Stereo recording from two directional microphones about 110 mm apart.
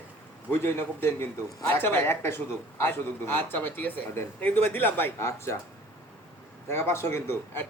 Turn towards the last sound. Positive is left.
turn(degrees=20)  # may be behind; listen again after turning